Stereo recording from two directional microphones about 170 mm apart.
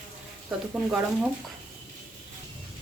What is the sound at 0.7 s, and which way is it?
Speech, 10° right (ahead or behind).